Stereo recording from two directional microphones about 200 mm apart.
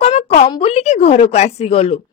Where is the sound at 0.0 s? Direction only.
35° left (ahead or behind).